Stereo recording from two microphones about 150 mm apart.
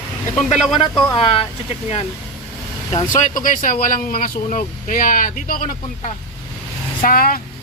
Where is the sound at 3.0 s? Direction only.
60° left (ahead or behind).